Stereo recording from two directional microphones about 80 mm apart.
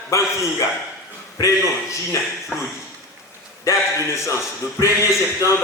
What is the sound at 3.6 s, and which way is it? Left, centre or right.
A man's voice, left.